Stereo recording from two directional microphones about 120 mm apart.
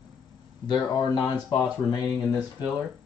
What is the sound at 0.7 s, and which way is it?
Speech, 35° left (ahead or behind).